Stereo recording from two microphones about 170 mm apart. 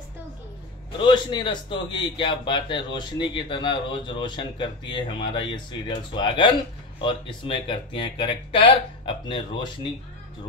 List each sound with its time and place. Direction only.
0.9 s a man's voice: 30° left (ahead or behind)